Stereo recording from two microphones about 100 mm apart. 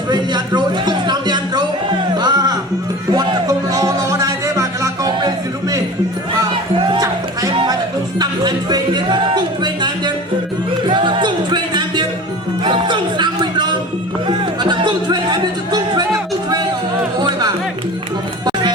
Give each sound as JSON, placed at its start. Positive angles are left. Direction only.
{"t": 0.1, "sound": "a sound", "side_deg": -45}
{"t": 2.1, "sound": "music", "side_deg": -45}
{"t": 6.8, "sound": "music", "side_deg": -45}
{"t": 17.2, "sound": "music", "side_deg": -50}